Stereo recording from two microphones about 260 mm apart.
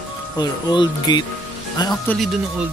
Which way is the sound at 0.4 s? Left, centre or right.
Centre.